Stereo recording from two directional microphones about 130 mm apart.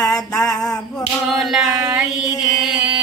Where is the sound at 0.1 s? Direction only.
5° left (ahead or behind).